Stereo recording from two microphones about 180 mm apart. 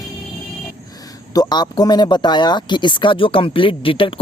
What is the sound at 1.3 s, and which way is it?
Speech, 20° left (ahead or behind).